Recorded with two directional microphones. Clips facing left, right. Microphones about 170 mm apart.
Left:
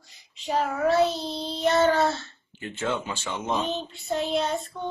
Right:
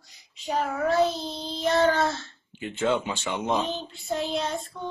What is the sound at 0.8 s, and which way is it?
Child singing, centre (ahead or behind).